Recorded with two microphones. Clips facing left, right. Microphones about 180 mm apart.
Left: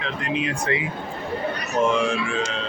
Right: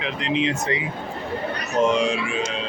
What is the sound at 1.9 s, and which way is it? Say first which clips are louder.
Speech: even; 15° right (ahead or behind).